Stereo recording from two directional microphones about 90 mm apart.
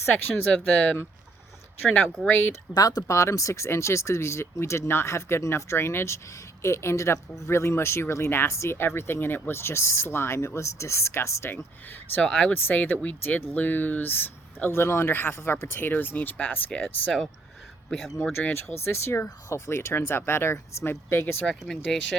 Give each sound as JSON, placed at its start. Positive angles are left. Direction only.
{"t": 0.5, "sound": "speech", "side_deg": 15}
{"t": 2.7, "sound": "speech", "side_deg": 45}
{"t": 12.1, "sound": "speech", "side_deg": 15}
{"t": 17.8, "sound": "speech", "side_deg": 0}
{"t": 18.2, "sound": "speech", "side_deg": 20}